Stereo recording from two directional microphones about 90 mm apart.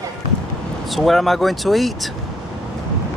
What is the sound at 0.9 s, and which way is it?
Speech, centre (ahead or behind).